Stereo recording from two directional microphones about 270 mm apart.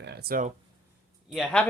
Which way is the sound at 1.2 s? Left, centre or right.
Centre.